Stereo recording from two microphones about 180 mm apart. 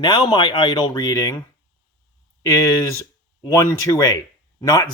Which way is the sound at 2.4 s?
20° left (ahead or behind).